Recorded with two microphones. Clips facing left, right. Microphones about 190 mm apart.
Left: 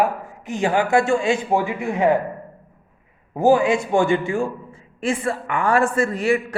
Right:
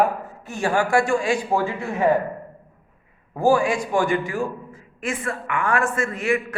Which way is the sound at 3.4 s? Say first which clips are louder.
Left 3 dB; 20° left (ahead or behind).